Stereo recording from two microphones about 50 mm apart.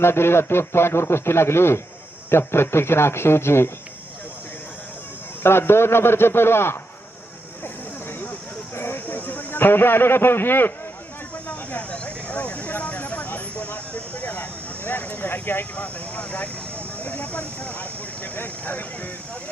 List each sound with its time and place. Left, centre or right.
0.0 s speech: left
5.4 s a man's voice: left
8.7 s a sound: left
9.0 s a man's voice: left
11.4 s vehicle: left
15.7 s speech: left